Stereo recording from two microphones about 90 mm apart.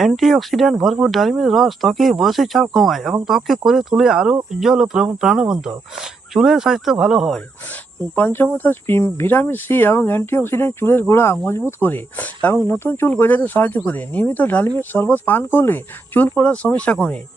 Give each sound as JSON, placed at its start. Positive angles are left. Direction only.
{"t": 0.0, "sound": "speech", "side_deg": 0}
{"t": 8.1, "sound": "speech", "side_deg": 25}